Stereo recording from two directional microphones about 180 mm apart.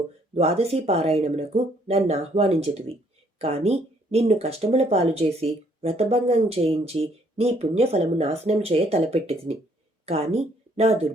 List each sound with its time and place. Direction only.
0.3 s speech: 35° right (ahead or behind)